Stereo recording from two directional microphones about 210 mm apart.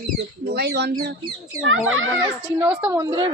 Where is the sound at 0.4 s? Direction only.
50° right (ahead or behind).